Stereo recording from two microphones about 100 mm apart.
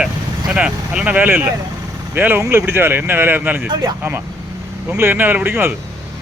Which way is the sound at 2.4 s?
30° right (ahead or behind).